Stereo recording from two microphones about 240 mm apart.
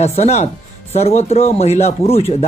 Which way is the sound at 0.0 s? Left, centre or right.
Left.